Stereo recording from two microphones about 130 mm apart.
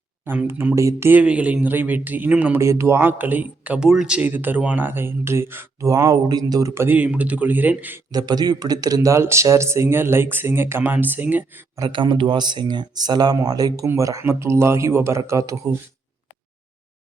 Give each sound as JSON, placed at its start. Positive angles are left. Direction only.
{"t": 0.3, "sound": "speech", "side_deg": -15}
{"t": 6.8, "sound": "speech", "side_deg": -10}
{"t": 8.1, "sound": "speech", "side_deg": -30}
{"t": 11.8, "sound": "speech", "side_deg": -35}